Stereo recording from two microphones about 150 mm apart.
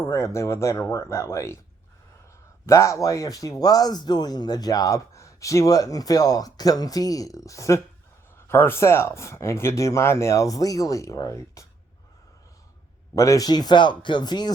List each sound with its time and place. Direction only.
0.1 s speech: 20° left (ahead or behind)
2.6 s speech: 20° left (ahead or behind)
13.1 s speech: 20° left (ahead or behind)